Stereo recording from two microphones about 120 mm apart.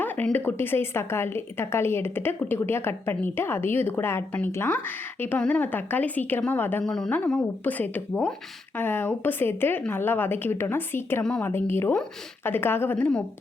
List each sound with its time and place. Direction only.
0.3 s a woman's voice: 15° left (ahead or behind)
6.8 s a woman's voice: 5° left (ahead or behind)
11.2 s a woman's voice: 5° left (ahead or behind)
11.4 s a woman's voice: 20° left (ahead or behind)